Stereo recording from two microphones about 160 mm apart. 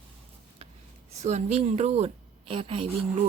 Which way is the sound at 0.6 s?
40° right (ahead or behind).